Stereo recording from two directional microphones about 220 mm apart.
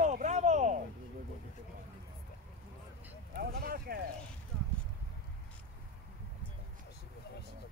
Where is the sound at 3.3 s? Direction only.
45° right (ahead or behind).